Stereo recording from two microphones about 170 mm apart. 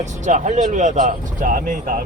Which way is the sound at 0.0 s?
45° right (ahead or behind).